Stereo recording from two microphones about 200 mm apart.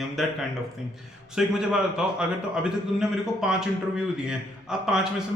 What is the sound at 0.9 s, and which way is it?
A man's voice, centre (ahead or behind).